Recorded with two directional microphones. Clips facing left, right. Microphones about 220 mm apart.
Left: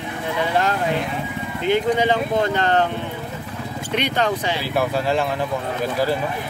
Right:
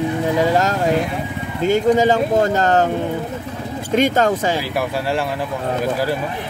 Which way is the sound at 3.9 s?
45° right (ahead or behind).